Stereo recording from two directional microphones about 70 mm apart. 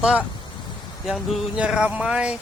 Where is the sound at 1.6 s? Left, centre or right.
Centre.